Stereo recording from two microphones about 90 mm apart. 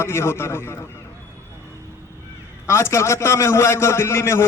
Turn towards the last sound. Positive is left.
turn(degrees=30)  # may be behind; listen again after turning